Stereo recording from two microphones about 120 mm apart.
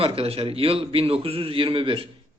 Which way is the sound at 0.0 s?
55° right (ahead or behind).